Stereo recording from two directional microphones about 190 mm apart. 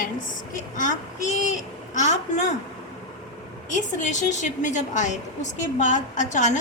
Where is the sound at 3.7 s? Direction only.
40° left (ahead or behind).